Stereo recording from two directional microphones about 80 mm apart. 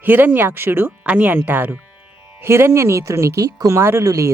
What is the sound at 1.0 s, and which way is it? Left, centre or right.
Speech, centre.